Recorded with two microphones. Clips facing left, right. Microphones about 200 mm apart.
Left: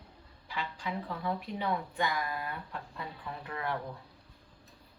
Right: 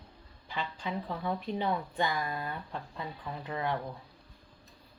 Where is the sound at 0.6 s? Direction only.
25° right (ahead or behind).